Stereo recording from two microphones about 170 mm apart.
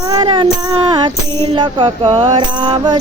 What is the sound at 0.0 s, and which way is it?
Music, 25° right (ahead or behind).